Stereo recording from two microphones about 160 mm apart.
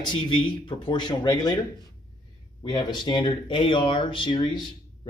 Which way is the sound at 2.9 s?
30° left (ahead or behind).